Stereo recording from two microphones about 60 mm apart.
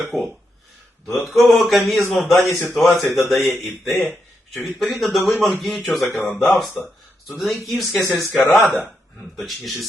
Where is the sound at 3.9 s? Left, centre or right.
Left.